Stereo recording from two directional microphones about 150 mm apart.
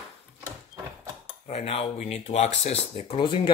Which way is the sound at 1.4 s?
45° left (ahead or behind).